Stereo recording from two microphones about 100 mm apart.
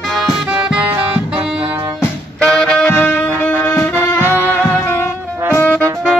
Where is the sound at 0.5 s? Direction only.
15° right (ahead or behind).